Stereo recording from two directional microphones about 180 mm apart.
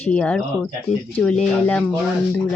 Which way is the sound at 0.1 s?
5° left (ahead or behind).